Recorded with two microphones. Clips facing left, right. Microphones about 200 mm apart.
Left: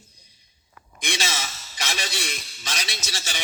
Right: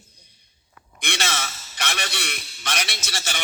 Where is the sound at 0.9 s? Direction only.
60° right (ahead or behind).